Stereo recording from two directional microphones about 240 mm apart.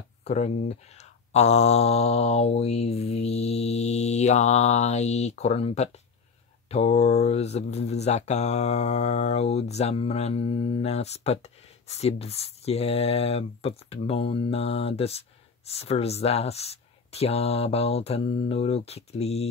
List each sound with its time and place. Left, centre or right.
0.2 s speech: left